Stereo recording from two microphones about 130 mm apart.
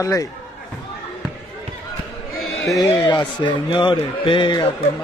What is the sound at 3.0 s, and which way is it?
A man's voice, 35° left (ahead or behind).